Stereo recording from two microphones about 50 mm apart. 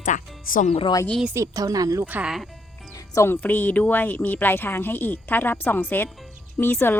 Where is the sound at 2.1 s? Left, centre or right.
Right.